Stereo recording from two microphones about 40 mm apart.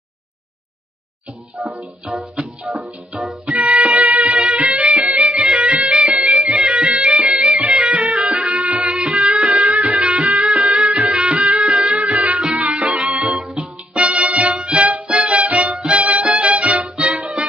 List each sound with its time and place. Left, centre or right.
1.5 s music: right
3.4 s music: right
4.3 s music: right
10.0 s music: right
10.2 s music: right
14.8 s music: right